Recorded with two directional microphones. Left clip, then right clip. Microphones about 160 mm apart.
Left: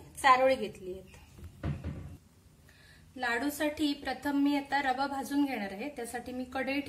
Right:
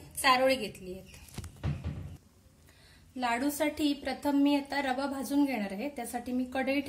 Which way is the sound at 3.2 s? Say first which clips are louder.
Right 1 dB; 60° right (ahead or behind).